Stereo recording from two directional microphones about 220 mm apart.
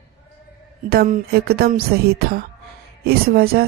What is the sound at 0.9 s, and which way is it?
Speech, 45° right (ahead or behind).